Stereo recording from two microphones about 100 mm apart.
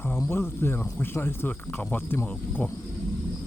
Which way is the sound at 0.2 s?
25° left (ahead or behind).